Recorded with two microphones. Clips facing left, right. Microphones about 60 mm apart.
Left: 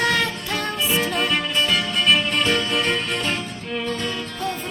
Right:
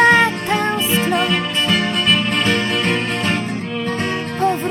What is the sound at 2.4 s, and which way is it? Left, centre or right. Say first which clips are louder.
Music: right 3 dB; right.